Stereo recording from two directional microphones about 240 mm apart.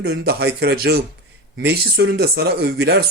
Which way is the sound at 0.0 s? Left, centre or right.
Right.